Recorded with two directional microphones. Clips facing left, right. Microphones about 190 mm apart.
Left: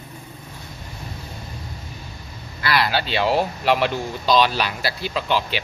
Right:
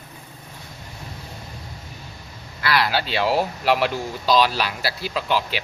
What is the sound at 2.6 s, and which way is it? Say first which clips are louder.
Speech: even; centre (ahead or behind).